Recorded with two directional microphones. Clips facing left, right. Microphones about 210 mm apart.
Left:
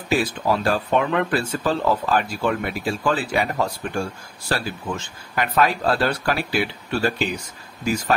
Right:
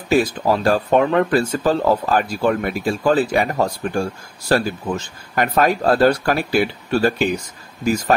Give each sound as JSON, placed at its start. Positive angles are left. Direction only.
{"t": 0.1, "sound": "speech", "side_deg": -40}